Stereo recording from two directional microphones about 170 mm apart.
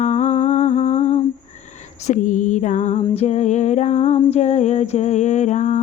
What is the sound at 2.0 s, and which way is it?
Music, 45° left (ahead or behind).